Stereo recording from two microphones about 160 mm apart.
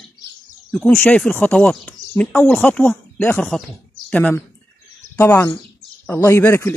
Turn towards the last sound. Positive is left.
turn(degrees=15)  # may be behind; listen again after turning